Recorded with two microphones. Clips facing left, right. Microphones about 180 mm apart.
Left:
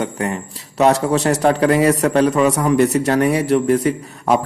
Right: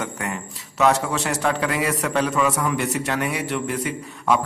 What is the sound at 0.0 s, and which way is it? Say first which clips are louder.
A man's voice: left 7 dB; 35° left (ahead or behind).